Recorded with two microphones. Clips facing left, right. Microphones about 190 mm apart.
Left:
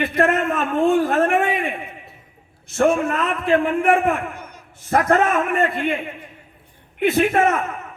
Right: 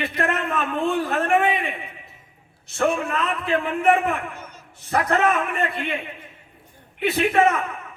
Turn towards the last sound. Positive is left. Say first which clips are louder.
# left 2 dB
turn(degrees=45)  # may be behind; listen again after turning